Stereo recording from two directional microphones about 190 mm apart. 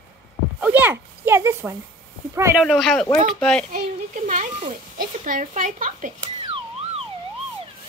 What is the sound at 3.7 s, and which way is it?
Speech, 45° right (ahead or behind).